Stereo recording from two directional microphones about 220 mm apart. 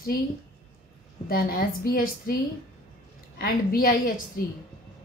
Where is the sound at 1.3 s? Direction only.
40° left (ahead or behind).